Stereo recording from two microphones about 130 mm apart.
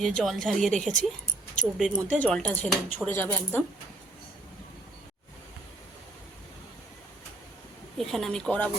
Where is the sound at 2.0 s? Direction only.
10° left (ahead or behind).